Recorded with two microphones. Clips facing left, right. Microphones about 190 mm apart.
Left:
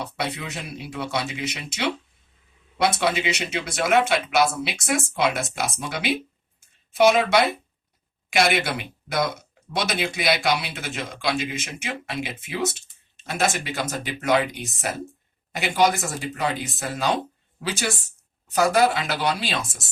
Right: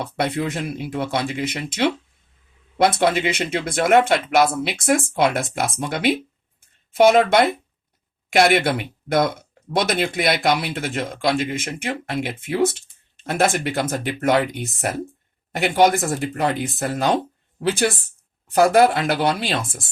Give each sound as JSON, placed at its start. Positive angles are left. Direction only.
{"t": 0.0, "sound": "speech", "side_deg": -50}
{"t": 6.6, "sound": "a sound", "side_deg": -55}
{"t": 8.3, "sound": "speech", "side_deg": -55}